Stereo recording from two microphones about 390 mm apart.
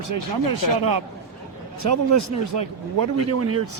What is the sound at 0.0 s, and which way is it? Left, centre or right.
A man's voice, right.